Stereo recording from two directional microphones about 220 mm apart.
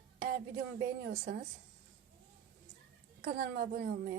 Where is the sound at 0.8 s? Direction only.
45° right (ahead or behind).